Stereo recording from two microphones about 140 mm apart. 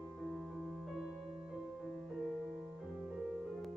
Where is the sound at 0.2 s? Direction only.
5° right (ahead or behind).